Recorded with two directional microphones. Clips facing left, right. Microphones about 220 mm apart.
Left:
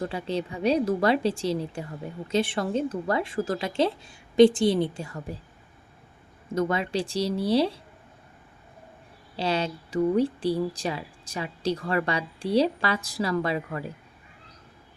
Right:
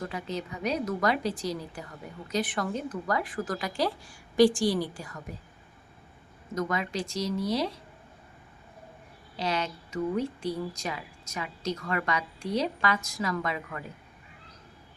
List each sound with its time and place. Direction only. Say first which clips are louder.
0.0 s a woman's voice: left 5 dB; 30° left (ahead or behind)
6.5 s speech: left 5 dB; 30° left (ahead or behind)
9.3 s speech: left 4 dB; 30° left (ahead or behind)